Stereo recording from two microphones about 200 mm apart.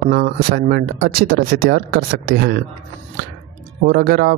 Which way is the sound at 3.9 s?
50° right (ahead or behind).